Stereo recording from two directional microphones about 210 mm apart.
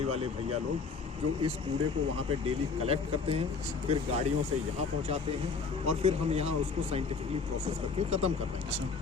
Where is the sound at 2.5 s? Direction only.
30° right (ahead or behind).